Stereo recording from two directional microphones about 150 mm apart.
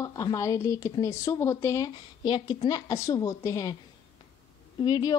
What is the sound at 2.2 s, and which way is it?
A woman's voice, 30° left (ahead or behind).